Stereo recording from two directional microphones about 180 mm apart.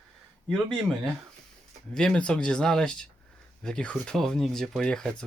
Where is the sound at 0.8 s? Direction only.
Centre (ahead or behind).